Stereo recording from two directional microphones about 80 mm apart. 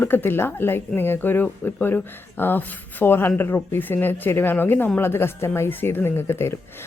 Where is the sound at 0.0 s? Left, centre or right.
Left.